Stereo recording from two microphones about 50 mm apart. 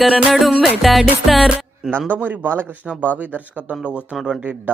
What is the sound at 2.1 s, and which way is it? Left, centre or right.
Speech, right.